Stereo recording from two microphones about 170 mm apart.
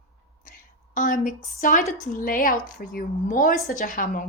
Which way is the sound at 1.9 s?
55° left (ahead or behind).